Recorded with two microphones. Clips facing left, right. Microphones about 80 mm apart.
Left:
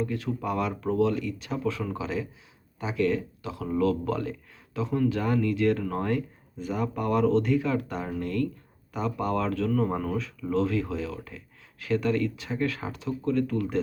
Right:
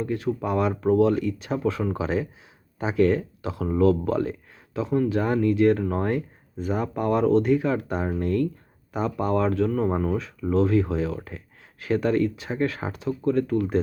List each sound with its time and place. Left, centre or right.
0.0 s speech: right
13.1 s speech: right